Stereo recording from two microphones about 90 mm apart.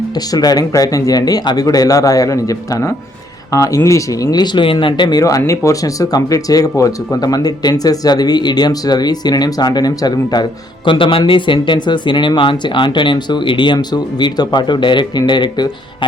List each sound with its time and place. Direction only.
0.3 s a man's voice: 45° left (ahead or behind)
5.5 s speech: 35° left (ahead or behind); by 13.7 s 65° left (ahead or behind)
13.7 s speech: 55° left (ahead or behind)